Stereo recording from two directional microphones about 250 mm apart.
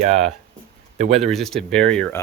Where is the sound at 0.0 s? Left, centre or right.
Right.